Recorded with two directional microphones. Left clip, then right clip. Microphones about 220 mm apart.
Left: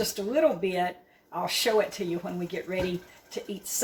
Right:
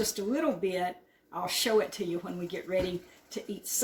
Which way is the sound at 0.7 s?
20° right (ahead or behind).